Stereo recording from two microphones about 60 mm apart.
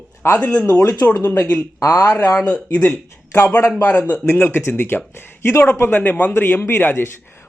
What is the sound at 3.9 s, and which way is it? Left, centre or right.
Speech, left.